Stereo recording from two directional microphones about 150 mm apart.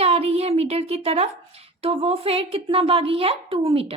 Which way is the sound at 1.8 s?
40° right (ahead or behind).